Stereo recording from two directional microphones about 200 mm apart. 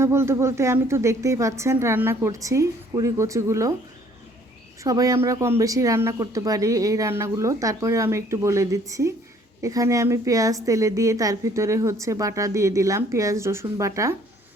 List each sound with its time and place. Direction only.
0.0 s a woman's voice: 15° right (ahead or behind)
4.8 s a woman's voice: 15° right (ahead or behind)